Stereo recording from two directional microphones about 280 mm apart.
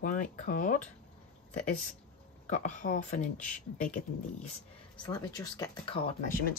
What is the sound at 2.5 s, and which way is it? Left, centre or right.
Speech, left.